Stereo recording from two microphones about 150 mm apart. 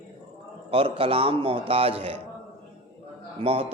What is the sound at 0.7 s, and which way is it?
A man's voice, 40° right (ahead or behind).